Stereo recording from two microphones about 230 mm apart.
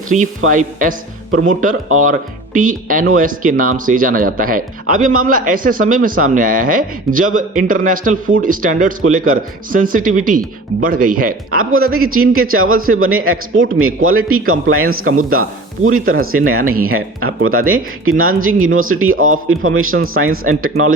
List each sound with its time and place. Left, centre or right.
0.1 s speech: right
11.5 s a man's voice: right